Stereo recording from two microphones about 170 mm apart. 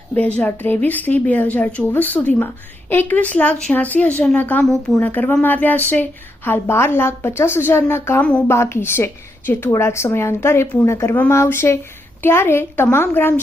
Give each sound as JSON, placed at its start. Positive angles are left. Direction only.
{"t": 0.1, "sound": "speech", "side_deg": 10}